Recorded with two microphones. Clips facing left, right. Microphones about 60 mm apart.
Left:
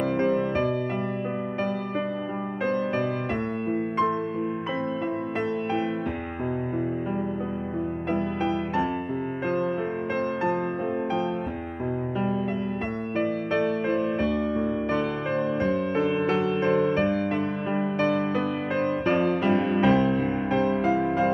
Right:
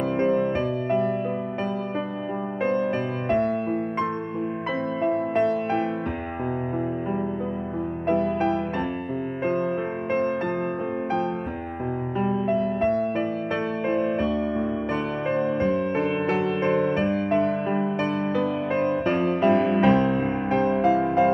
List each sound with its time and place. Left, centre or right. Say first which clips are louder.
0.2 s music: right 3 dB; right
5.0 s music: right 6 dB; right
8.4 s music: right 1 dB; right
13.6 s music: even; right
15.3 s music: right 2 dB; right
19.2 s music: right 3 dB; right